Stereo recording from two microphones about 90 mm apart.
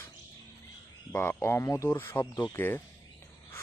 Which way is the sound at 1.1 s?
25° left (ahead or behind).